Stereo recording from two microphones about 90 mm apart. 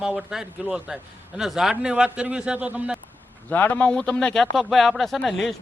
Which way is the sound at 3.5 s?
15° left (ahead or behind).